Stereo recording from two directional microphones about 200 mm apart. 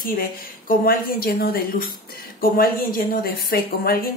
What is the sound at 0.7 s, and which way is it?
Speech, 50° left (ahead or behind).